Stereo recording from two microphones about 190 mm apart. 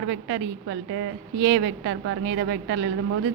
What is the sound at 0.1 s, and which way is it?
A woman's voice, 80° right.